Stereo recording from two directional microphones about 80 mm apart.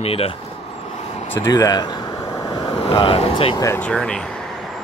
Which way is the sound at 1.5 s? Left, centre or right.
Left.